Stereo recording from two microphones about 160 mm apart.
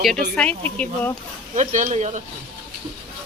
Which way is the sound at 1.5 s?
50° right (ahead or behind).